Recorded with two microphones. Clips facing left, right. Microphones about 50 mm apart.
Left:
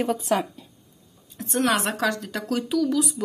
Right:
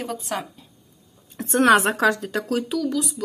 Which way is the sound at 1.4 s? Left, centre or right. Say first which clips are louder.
Right 5 dB; right.